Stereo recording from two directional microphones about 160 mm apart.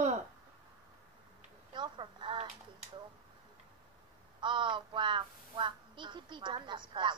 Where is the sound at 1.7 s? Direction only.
30° right (ahead or behind).